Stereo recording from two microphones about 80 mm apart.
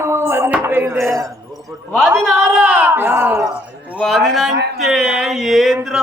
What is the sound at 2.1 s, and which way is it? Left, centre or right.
Speech, right.